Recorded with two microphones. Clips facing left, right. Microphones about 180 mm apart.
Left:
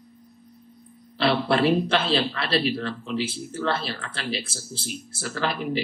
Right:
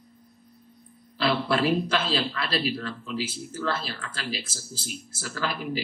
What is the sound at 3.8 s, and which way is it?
Speech, 65° left (ahead or behind).